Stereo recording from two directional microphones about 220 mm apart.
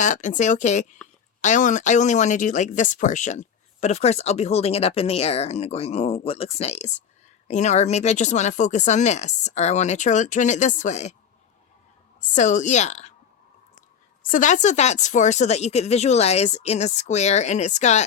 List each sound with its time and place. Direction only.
0.0 s speech: 35° left (ahead or behind)
12.3 s speech: 35° left (ahead or behind)
14.3 s speech: 35° left (ahead or behind)